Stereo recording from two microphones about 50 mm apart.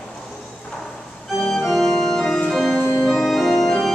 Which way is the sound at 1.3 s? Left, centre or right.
Centre.